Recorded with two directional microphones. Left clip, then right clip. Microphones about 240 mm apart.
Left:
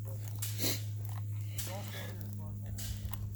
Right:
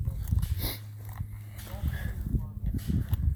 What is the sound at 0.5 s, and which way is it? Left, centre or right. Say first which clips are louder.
Dog: left 3 dB; centre.